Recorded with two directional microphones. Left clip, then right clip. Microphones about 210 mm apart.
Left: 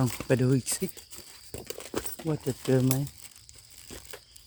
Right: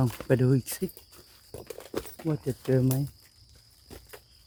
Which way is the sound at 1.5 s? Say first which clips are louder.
Left 1 dB; 50° left (ahead or behind).